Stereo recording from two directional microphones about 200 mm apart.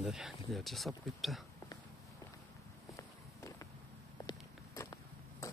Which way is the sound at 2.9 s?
15° left (ahead or behind).